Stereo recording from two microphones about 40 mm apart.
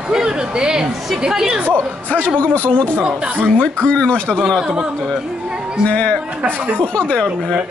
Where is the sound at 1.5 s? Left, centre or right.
Right.